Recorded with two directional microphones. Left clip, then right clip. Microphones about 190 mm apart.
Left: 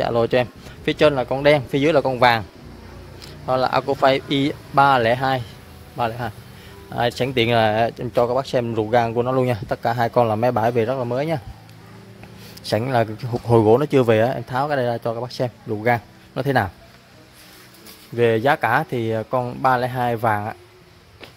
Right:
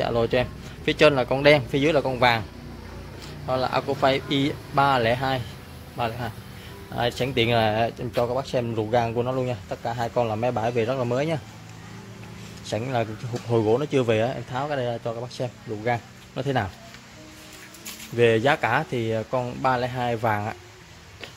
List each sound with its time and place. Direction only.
0.0 s speech: 30° left (ahead or behind)
0.9 s speech: 10° left (ahead or behind)
1.7 s speech: 25° left (ahead or behind)
8.1 s speech: 45° left (ahead or behind); by 11.0 s 25° left (ahead or behind)
11.0 s speech: 10° left (ahead or behind)
12.6 s speech: 30° left (ahead or behind)
18.1 s speech: 15° left (ahead or behind)